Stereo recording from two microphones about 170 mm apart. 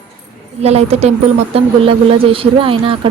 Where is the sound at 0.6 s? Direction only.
40° right (ahead or behind).